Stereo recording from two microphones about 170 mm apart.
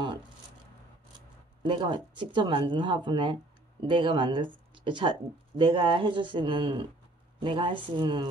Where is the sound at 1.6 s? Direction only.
30° right (ahead or behind).